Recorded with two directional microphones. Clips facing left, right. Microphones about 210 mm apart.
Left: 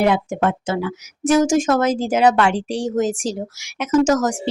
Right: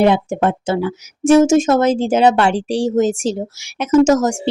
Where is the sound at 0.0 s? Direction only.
25° right (ahead or behind).